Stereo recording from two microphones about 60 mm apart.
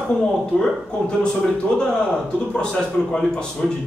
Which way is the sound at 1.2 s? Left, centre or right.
Centre.